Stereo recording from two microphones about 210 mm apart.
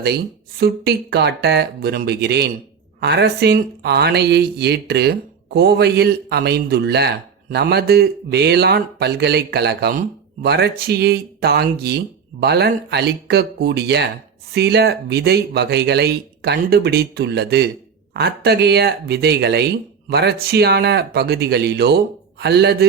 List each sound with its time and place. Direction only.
0.0 s speech: 50° right (ahead or behind)